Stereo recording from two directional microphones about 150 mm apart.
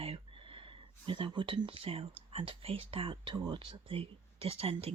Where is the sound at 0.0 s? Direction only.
40° right (ahead or behind).